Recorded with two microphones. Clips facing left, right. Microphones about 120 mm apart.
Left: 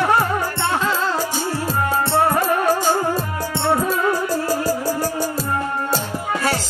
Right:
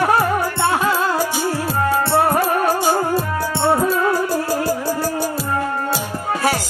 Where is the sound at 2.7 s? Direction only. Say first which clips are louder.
Right 1 dB; 15° right (ahead or behind).